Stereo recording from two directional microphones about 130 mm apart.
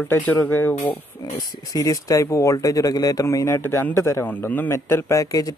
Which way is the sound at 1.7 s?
25° left (ahead or behind).